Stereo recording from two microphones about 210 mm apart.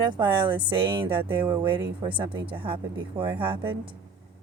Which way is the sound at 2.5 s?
25° right (ahead or behind).